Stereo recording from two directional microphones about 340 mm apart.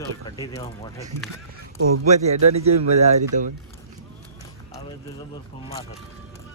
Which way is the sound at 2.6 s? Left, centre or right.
Centre.